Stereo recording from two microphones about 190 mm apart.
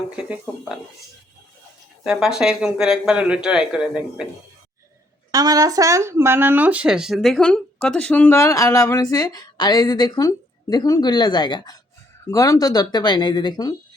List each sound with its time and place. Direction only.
2.0 s speech: 5° right (ahead or behind)
5.3 s speech: 20° right (ahead or behind); by 13.7 s 20° left (ahead or behind)